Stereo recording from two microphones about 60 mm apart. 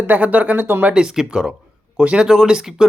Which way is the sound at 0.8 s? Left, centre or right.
Centre.